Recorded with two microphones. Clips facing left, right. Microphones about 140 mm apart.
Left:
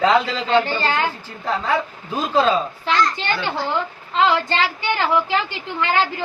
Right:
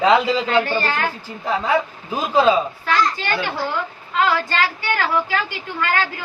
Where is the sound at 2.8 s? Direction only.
25° left (ahead or behind).